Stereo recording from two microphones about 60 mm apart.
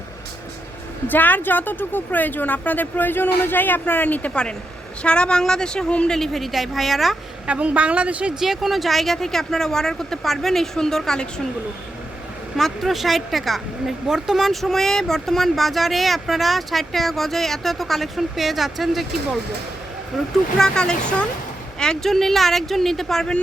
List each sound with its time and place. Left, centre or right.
1.0 s a woman's voice: left
5.0 s speech: centre
6.1 s speech: centre
7.4 s a woman's voice: right
8.4 s speech: centre
12.5 s speech: centre
20.1 s speech: centre